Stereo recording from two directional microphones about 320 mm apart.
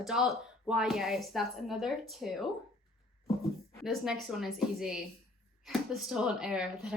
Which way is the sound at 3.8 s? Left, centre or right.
Centre.